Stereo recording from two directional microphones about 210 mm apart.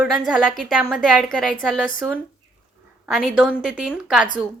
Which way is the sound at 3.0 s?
Centre (ahead or behind).